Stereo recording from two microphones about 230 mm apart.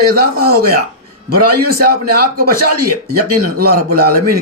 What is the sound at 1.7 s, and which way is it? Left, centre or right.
Speech, right.